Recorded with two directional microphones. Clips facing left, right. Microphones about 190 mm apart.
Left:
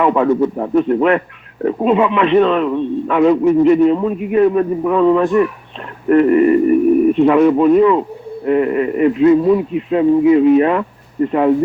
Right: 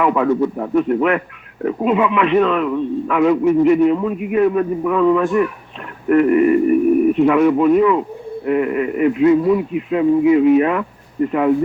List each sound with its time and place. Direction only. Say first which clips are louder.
0.0 s a man's voice: left 2 dB; 35° left (ahead or behind)